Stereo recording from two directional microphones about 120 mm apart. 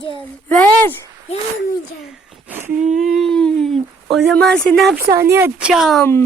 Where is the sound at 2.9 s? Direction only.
Centre (ahead or behind).